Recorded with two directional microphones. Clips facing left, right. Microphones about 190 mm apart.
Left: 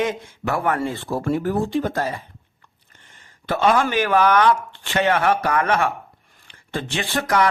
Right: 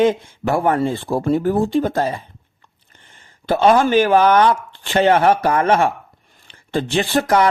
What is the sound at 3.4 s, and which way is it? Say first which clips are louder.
Speech: right 5 dB; 30° right (ahead or behind).